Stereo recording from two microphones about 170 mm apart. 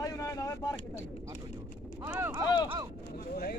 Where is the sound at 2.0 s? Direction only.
15° right (ahead or behind).